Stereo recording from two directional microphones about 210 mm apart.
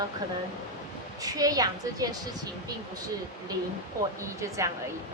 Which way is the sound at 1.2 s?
15° right (ahead or behind).